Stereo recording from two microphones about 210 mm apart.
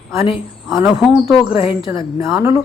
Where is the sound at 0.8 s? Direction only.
Centre (ahead or behind).